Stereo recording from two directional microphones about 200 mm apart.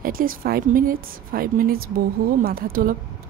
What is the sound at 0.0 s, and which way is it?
Speech, 45° right (ahead or behind).